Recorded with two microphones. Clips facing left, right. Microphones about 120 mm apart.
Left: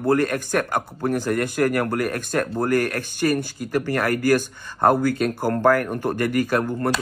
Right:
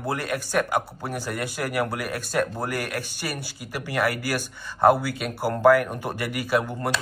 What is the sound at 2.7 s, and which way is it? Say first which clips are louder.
Speech: left 9 dB; 10° right (ahead or behind).